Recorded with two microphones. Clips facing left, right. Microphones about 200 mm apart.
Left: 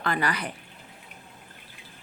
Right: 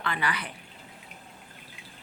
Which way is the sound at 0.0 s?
40° left (ahead or behind).